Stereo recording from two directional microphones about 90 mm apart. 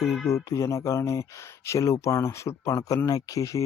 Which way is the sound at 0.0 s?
Centre (ahead or behind).